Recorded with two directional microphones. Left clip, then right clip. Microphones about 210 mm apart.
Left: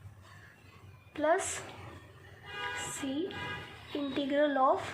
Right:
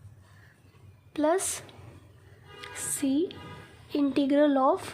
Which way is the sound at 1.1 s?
85° right.